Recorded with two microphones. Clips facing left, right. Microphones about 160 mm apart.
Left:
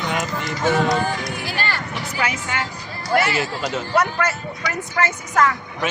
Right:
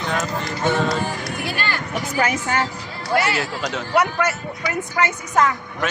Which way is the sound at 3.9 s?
15° right (ahead or behind).